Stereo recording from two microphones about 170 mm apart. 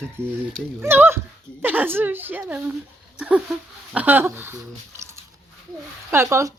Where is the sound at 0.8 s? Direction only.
10° right (ahead or behind).